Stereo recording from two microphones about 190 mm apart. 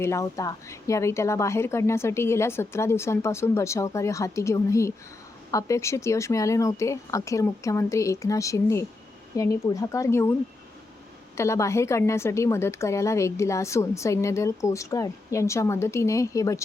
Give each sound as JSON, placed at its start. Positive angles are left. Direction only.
{"t": 0.0, "sound": "a woman's voice", "side_deg": 15}
{"t": 11.3, "sound": "a woman's voice", "side_deg": 15}